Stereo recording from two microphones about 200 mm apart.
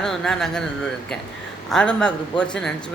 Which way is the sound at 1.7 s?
5° left (ahead or behind).